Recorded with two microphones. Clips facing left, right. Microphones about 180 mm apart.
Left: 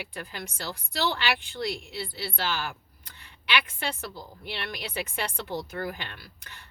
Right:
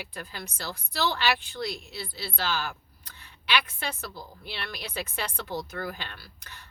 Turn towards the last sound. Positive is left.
turn(degrees=15)  # may be behind; listen again after turning